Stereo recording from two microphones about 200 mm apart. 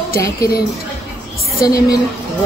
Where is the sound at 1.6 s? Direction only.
20° left (ahead or behind).